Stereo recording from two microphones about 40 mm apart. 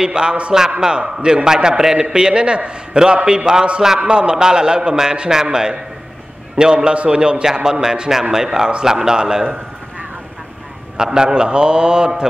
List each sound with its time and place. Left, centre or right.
0.0 s a man's voice: right
11.0 s a man's voice: centre